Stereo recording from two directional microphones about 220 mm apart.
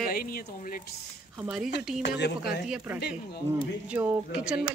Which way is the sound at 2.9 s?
45° left (ahead or behind).